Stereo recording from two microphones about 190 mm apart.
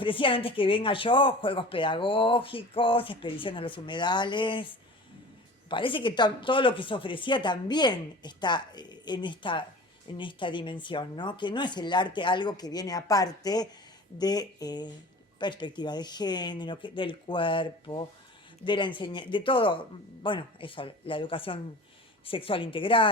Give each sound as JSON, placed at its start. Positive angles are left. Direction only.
{"t": 0.0, "sound": "speech", "side_deg": 25}